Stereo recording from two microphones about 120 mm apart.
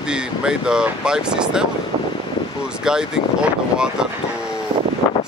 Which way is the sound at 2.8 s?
5° right (ahead or behind).